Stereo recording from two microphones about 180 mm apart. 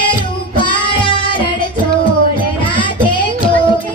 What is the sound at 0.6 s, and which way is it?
Music, 25° left (ahead or behind).